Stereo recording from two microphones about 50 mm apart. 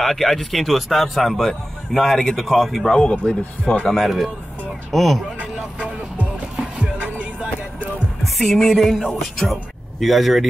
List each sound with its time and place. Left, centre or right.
0.0 s speech: centre
4.0 s speech: centre
6.8 s music: right
8.4 s a man's voice: centre